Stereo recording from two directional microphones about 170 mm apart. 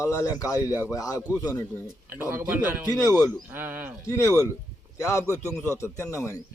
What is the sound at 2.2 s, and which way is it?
Speech, 10° right (ahead or behind).